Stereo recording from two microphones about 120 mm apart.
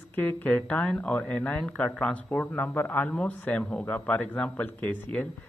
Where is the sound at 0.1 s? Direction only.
15° left (ahead or behind).